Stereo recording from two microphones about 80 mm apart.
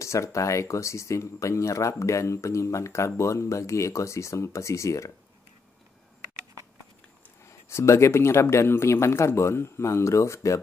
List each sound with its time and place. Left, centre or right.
0.0 s speech: left
7.4 s speech: left